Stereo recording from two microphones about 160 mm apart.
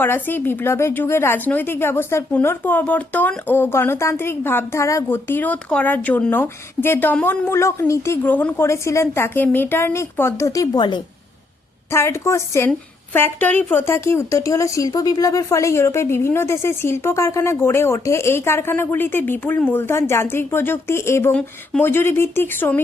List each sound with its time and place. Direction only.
0.0 s a woman's voice: 10° left (ahead or behind); by 11.0 s 30° left (ahead or behind)
11.9 s a woman's voice: 15° left (ahead or behind)